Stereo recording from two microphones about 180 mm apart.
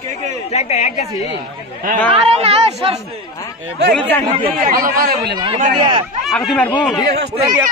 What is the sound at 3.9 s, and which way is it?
Speech, 10° left (ahead or behind).